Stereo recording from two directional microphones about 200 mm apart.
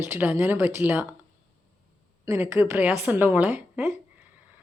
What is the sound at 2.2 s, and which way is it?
Speech, 15° right (ahead or behind).